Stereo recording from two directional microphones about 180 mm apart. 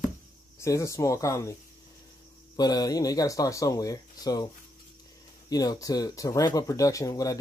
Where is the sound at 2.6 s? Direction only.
20° left (ahead or behind).